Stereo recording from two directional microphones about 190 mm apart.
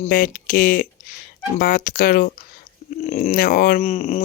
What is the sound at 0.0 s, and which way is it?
Speech, 45° left (ahead or behind).